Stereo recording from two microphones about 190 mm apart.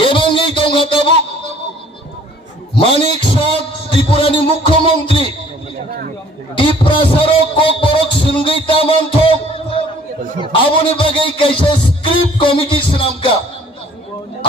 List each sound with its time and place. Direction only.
0.0 s a sound: 25° left (ahead or behind)
2.7 s music: 25° left (ahead or behind)
4.1 s a man's voice: 30° left (ahead or behind)
6.6 s a man's voice: 25° left (ahead or behind)